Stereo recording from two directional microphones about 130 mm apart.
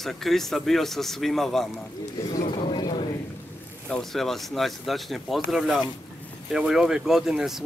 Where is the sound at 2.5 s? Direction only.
35° left (ahead or behind).